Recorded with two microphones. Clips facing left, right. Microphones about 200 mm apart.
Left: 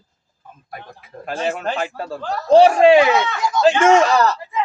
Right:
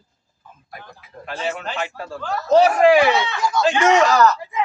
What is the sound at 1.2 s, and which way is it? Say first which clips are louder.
Speech: left 4 dB; 45° left (ahead or behind).